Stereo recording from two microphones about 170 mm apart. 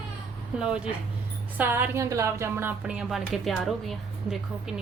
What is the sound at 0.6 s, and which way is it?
A woman's voice, 5° right (ahead or behind).